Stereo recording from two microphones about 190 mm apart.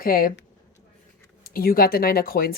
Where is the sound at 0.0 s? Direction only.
50° left (ahead or behind).